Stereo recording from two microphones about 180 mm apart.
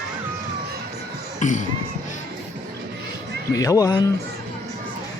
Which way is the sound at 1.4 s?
45° left (ahead or behind).